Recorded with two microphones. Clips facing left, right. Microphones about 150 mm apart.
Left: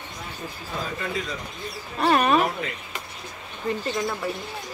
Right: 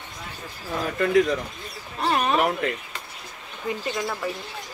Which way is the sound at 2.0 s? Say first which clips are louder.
Left 3 dB; 70° left (ahead or behind).